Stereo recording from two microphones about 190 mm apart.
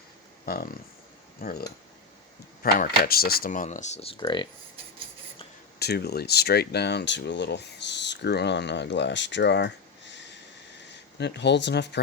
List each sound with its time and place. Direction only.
0.4 s speech: 50° left (ahead or behind)
2.8 s speech: 55° left (ahead or behind); by 4.4 s 25° left (ahead or behind)
5.8 s speech: 60° left (ahead or behind)